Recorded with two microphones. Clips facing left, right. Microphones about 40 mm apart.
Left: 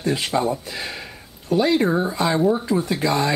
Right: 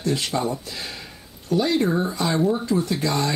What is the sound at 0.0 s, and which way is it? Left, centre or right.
Speech, centre.